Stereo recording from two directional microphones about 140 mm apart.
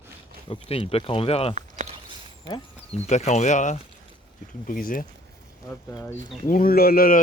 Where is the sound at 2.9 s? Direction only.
50° left (ahead or behind).